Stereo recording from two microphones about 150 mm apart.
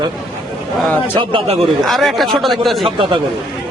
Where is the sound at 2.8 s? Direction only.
35° right (ahead or behind).